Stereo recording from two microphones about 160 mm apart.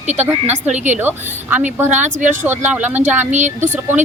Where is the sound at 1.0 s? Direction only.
10° right (ahead or behind).